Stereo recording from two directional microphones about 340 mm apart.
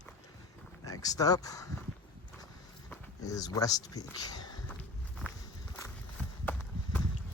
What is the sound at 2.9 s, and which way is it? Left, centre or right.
Speech, centre.